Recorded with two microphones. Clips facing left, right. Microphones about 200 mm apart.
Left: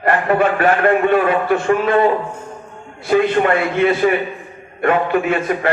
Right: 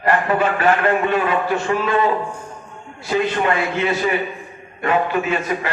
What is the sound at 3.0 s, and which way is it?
A man's voice, 55° left (ahead or behind).